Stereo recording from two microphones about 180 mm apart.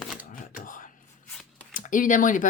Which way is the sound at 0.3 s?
50° left (ahead or behind).